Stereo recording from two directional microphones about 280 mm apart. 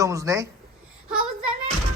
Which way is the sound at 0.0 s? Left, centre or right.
Centre.